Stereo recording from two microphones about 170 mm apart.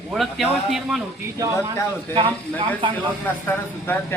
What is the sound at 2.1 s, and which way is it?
Speech, 30° right (ahead or behind).